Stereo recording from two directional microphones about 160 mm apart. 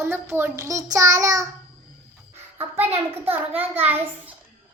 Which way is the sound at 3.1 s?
10° right (ahead or behind).